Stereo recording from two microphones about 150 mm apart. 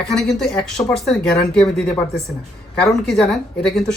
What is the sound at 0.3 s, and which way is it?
Speech, 5° left (ahead or behind).